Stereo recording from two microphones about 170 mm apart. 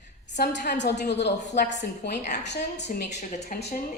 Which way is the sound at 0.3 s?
70° left (ahead or behind).